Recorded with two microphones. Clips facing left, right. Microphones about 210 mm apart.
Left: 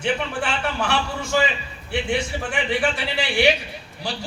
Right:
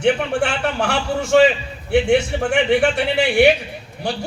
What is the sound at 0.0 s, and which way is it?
A man's voice, 70° right (ahead or behind).